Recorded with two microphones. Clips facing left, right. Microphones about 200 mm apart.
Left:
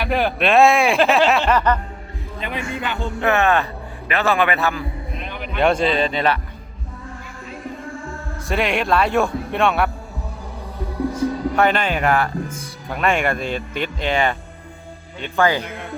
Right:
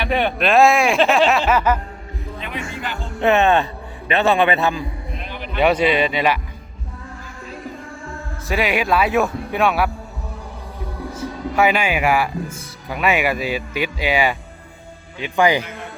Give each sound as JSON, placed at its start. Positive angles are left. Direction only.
{"t": 0.0, "sound": "speech", "side_deg": 0}
{"t": 3.2, "sound": "a man's voice", "side_deg": -20}
{"t": 5.1, "sound": "heart sounds", "side_deg": 0}
{"t": 5.8, "sound": "speech", "side_deg": 0}
{"t": 8.4, "sound": "speech", "side_deg": 0}
{"t": 11.2, "sound": "speech", "side_deg": -5}